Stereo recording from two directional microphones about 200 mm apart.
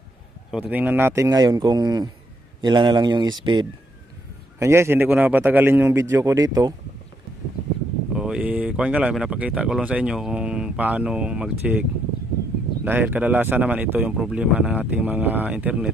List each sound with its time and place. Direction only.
0.5 s speech: 5° right (ahead or behind)
8.1 s speech: 5° right (ahead or behind)
12.8 s speech: 10° right (ahead or behind)